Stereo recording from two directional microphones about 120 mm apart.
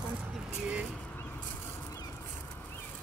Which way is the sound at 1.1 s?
15° left (ahead or behind).